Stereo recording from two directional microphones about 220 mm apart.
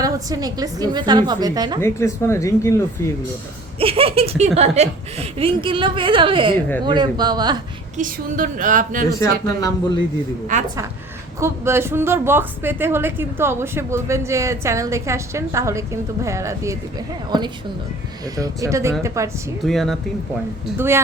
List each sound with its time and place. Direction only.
0.0 s a woman's voice: 15° right (ahead or behind)
1.8 s speech: 10° left (ahead or behind)
3.8 s speech: 25° right (ahead or behind)
7.9 s a woman's voice: 35° right (ahead or behind)
9.6 s speech: 15° left (ahead or behind)
10.5 s a woman's voice: 35° right (ahead or behind)
11.3 s a woman's voice: 10° right (ahead or behind)
18.3 s a woman's voice: 15° right (ahead or behind)
19.6 s speech: centre (ahead or behind)
20.7 s a woman's voice: 10° right (ahead or behind)